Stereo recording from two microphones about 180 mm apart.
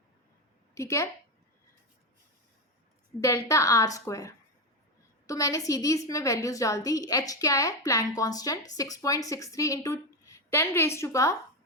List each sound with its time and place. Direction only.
0.7 s speech: 15° left (ahead or behind)
3.2 s a woman's voice: 15° left (ahead or behind)